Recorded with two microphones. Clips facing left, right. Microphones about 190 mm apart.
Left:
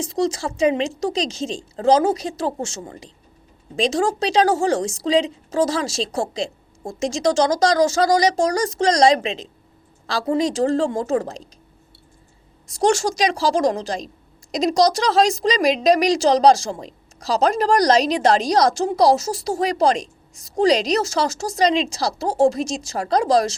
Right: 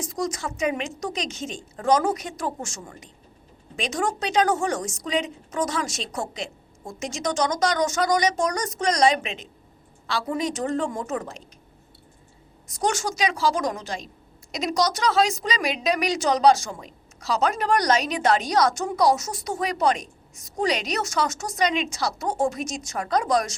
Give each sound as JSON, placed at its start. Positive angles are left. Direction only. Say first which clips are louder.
{"t": 0.0, "sound": "a woman's voice", "louder": "left 6 dB", "side_deg": 30}
{"t": 12.8, "sound": "a woman's voice", "louder": "left 6 dB", "side_deg": 30}